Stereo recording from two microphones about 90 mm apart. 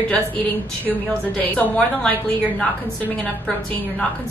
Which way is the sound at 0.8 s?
15° left (ahead or behind).